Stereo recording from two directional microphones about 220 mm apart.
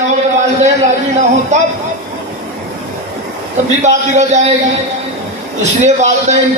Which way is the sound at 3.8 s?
30° right (ahead or behind).